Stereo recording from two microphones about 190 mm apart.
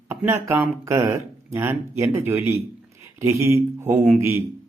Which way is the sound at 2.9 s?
15° right (ahead or behind).